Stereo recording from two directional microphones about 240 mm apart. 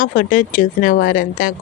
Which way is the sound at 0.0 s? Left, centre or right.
Left.